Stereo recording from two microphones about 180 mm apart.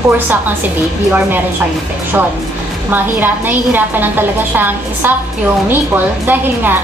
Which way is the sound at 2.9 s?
10° right (ahead or behind).